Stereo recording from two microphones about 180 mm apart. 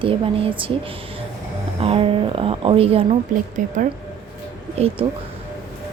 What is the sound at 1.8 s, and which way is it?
Speech, 30° right (ahead or behind).